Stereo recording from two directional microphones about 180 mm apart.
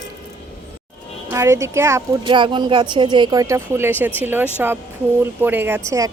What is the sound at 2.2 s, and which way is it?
Speech, 25° right (ahead or behind).